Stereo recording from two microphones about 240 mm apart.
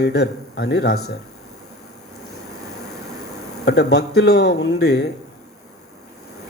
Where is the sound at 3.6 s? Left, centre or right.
Left.